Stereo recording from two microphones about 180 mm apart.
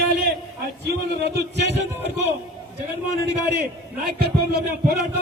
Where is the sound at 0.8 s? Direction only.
70° right (ahead or behind).